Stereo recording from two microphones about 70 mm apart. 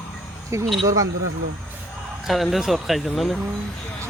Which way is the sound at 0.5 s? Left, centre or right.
Right.